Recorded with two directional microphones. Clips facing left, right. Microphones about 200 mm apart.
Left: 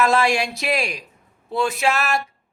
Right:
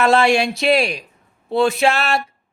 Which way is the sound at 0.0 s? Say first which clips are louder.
Right 4 dB; 30° right (ahead or behind).